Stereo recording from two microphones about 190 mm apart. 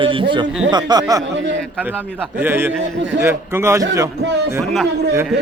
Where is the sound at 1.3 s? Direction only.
70° right (ahead or behind).